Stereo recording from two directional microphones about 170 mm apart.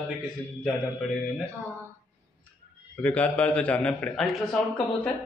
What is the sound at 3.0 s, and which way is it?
A man's voice, 10° left (ahead or behind).